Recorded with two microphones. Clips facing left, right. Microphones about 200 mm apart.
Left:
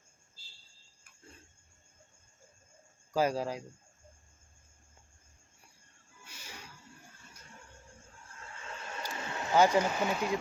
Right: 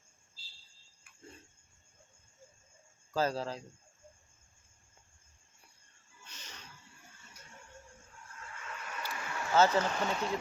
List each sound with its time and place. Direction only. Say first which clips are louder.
3.1 s speech: left 3 dB; 15° left (ahead or behind)
6.2 s a sound: left 3 dB; 10° left (ahead or behind)
8.4 s vehicle: left 1 dB; 30° left (ahead or behind)
9.1 s speech: left 1 dB; 25° left (ahead or behind)